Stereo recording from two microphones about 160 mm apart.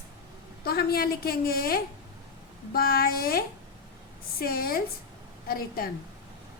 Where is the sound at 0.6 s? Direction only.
75° left (ahead or behind).